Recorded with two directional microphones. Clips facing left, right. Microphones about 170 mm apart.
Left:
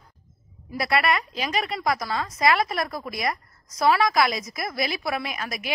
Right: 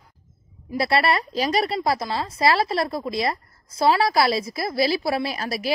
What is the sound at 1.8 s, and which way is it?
A woman's voice, 25° right (ahead or behind).